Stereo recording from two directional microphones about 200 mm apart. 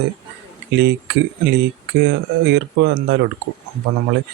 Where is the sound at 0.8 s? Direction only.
60° right (ahead or behind).